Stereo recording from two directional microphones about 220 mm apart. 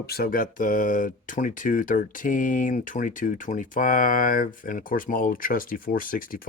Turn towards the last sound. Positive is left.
turn(degrees=40)  # may be behind; listen again after turning